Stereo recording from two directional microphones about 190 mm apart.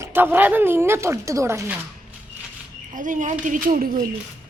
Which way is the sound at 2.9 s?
45° right (ahead or behind).